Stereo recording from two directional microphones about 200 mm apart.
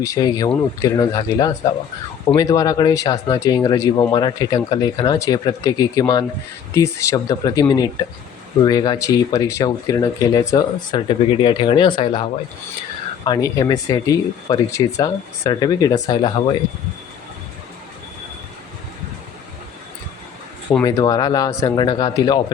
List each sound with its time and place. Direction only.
0.0 s speech: 20° left (ahead or behind)
20.8 s speech: 20° left (ahead or behind)